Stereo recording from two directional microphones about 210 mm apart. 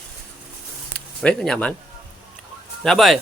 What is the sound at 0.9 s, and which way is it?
Speech, 5° left (ahead or behind).